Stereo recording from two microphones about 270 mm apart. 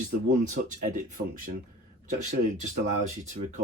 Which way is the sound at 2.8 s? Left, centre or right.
Right.